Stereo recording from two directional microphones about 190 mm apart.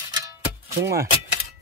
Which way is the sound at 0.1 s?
15° right (ahead or behind).